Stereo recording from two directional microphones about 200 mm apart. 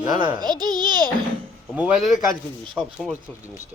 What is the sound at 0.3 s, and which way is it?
Speech, 20° right (ahead or behind).